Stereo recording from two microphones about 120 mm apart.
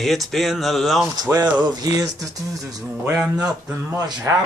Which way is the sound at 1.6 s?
35° right (ahead or behind).